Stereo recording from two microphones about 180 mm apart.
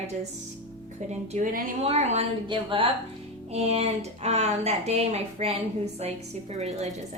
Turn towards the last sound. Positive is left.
turn(degrees=-40)  # may be behind; listen again after turning